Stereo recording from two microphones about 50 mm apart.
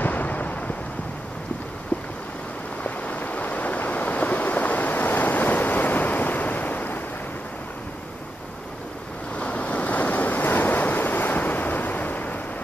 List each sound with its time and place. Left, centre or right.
0.0 s fireworks: left
2.8 s waves: left
9.4 s waves: left